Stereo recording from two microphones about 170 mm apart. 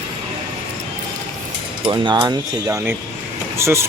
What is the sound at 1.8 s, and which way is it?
Speech, 25° right (ahead or behind).